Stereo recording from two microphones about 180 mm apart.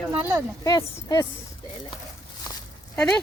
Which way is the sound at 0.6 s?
20° left (ahead or behind).